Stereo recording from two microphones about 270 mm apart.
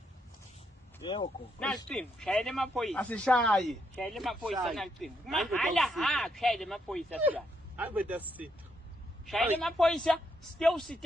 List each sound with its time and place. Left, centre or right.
1.0 s speech: centre
1.5 s a man's voice: centre
9.2 s speech: centre